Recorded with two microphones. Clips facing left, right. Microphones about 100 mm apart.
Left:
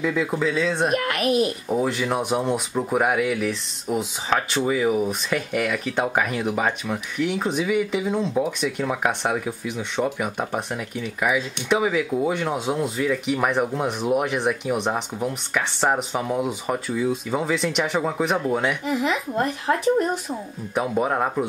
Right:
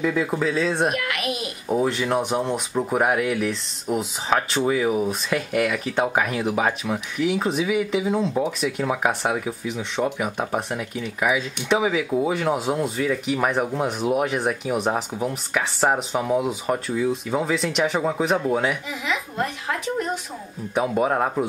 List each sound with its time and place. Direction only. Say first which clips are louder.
0.0 s speech: even; centre (ahead or behind)
0.9 s a child's voice: left 6 dB; 40° left (ahead or behind)
1.7 s speech: right 1 dB; centre (ahead or behind)
20.7 s speech: right 1 dB; centre (ahead or behind)